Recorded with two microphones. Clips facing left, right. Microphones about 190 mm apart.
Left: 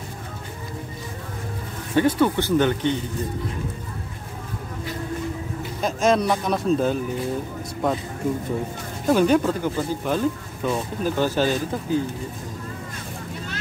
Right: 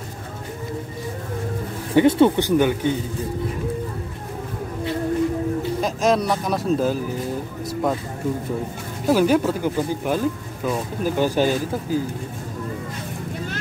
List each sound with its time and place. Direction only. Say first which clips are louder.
2.0 s speech: right 4 dB; 25° right (ahead or behind); by 3.0 s 10° right (ahead or behind)
5.8 s a man's voice: left 2 dB; centre (ahead or behind)
9.0 s speech: right 1 dB; 5° right (ahead or behind)